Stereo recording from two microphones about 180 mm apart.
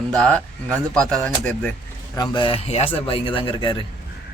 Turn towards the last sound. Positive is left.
turn(degrees=25)  # may be behind; listen again after turning